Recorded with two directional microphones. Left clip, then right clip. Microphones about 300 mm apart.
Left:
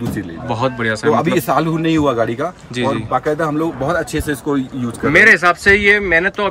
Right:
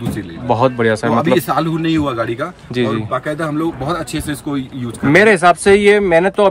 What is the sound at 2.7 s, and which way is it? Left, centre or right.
Speech, centre.